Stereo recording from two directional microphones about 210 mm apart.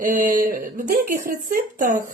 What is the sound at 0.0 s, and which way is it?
Speech, 40° right (ahead or behind).